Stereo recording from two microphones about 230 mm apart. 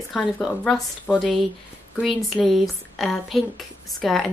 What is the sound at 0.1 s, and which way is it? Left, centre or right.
Speech, centre.